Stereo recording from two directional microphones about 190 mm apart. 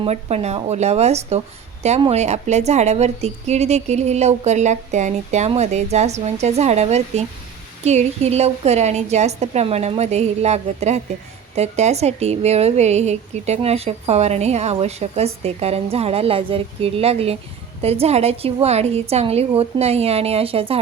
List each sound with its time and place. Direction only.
0.0 s a woman's voice: 35° right (ahead or behind)